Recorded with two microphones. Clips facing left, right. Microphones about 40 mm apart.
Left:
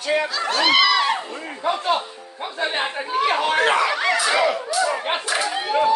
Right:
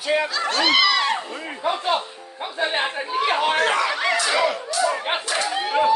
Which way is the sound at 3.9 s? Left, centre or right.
Centre.